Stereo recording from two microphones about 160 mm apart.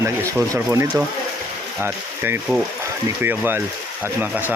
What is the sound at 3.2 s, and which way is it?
Speech, 15° right (ahead or behind).